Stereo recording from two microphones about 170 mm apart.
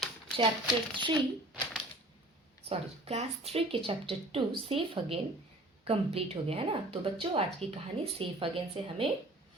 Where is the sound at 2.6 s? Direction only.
35° right (ahead or behind).